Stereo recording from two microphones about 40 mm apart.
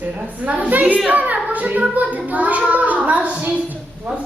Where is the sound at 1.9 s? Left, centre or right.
Right.